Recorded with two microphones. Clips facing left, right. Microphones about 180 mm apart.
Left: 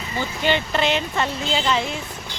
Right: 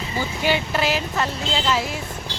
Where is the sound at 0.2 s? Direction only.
10° right (ahead or behind).